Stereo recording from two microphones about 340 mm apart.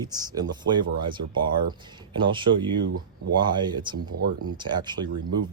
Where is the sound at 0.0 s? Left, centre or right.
Centre.